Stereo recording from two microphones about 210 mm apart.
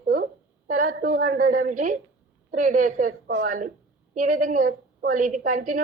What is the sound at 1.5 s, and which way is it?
A woman's voice, 40° right (ahead or behind).